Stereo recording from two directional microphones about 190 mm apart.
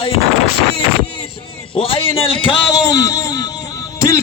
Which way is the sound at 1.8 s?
30° left (ahead or behind).